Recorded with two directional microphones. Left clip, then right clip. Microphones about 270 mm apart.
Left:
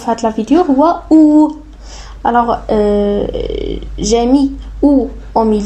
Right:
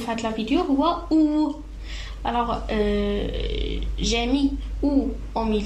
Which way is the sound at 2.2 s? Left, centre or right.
Left.